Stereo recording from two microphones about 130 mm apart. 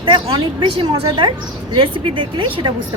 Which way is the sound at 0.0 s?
40° right (ahead or behind).